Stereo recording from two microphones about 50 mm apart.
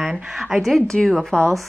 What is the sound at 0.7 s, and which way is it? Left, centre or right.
Speech, centre.